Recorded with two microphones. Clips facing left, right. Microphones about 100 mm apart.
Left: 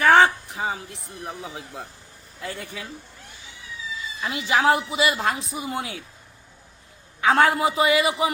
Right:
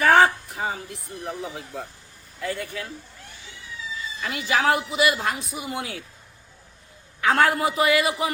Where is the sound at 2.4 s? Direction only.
25° left (ahead or behind).